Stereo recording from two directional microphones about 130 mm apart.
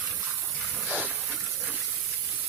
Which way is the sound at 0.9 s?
10° right (ahead or behind).